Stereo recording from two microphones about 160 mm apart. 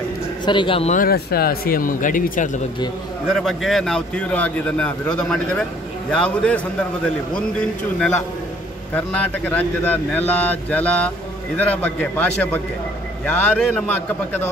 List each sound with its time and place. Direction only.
0.5 s a man's voice: 30° left (ahead or behind)
0.9 s speech: 70° left (ahead or behind); by 2.6 s 55° left (ahead or behind)
3.3 s a man's voice: centre (ahead or behind)